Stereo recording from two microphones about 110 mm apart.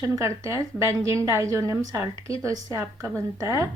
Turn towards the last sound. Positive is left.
turn(degrees=-25)  # may be behind; listen again after turning